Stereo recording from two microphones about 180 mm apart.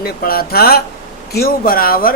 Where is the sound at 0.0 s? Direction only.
55° left (ahead or behind).